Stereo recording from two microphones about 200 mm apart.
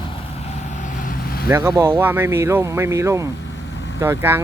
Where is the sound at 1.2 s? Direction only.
50° left (ahead or behind).